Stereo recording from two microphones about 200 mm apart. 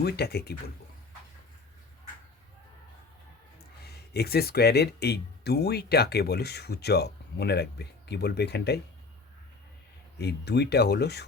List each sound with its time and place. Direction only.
0.0 s speech: 55° left (ahead or behind)
3.8 s speech: 55° left (ahead or behind)
10.2 s speech: 55° left (ahead or behind)